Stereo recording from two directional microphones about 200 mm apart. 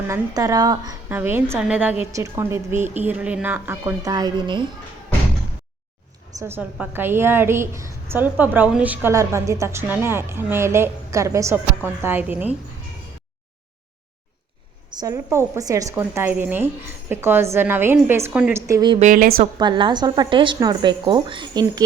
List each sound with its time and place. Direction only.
0.1 s a woman's voice: 15° right (ahead or behind)
6.4 s a woman's voice: 10° right (ahead or behind)
15.0 s a woman's voice: 15° right (ahead or behind)
18.7 s speech: 20° right (ahead or behind)
18.9 s a woman's voice: 40° right (ahead or behind)
19.5 s speech: 20° right (ahead or behind)